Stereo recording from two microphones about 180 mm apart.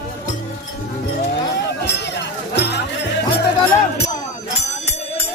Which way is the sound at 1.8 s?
70° left (ahead or behind).